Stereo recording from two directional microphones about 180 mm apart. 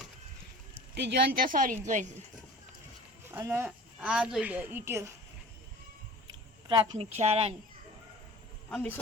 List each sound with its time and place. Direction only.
0.9 s speech: 70° right (ahead or behind); by 1.8 s 50° right (ahead or behind)
3.3 s a woman's voice: 15° right (ahead or behind)
6.7 s a woman's voice: 25° right (ahead or behind)
8.7 s a man's voice: 10° left (ahead or behind)